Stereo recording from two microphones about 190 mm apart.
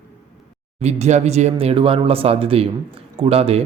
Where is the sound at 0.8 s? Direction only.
35° right (ahead or behind).